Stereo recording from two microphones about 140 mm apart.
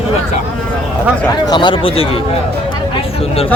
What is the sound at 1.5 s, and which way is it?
Speech, 35° left (ahead or behind).